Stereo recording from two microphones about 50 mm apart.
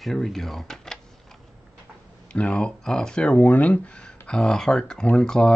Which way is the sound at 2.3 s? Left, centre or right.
Left.